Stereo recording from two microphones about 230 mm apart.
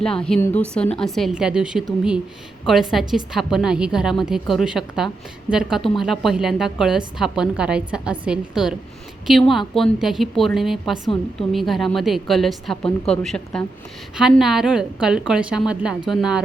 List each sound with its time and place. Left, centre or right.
0.0 s a woman's voice: centre